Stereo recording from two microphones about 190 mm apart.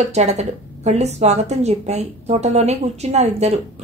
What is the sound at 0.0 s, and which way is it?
Speech, 35° right (ahead or behind).